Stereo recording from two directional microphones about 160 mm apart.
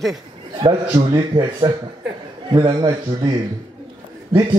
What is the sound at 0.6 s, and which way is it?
Speech, 25° right (ahead or behind).